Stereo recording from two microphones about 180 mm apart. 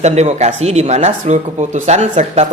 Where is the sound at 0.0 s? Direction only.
40° right (ahead or behind).